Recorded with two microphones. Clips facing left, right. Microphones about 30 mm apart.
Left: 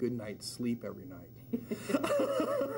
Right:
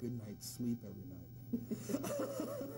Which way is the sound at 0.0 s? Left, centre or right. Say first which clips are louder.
Left 10 dB; left.